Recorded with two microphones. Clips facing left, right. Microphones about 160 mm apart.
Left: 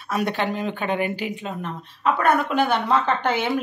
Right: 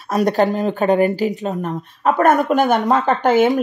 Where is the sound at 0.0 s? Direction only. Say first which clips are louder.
Right 8 dB; 40° right (ahead or behind).